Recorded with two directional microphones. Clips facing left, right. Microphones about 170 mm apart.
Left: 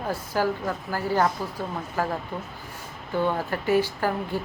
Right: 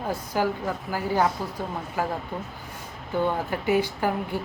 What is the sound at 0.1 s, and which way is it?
Speech, 15° right (ahead or behind).